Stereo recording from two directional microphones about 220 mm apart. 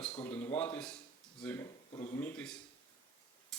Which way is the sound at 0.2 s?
5° left (ahead or behind).